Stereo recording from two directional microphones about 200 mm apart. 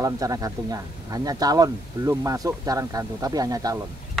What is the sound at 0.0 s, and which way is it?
Speech, 15° right (ahead or behind).